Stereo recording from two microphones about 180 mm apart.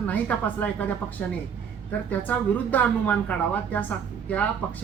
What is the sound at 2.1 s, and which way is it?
Speech, 10° left (ahead or behind).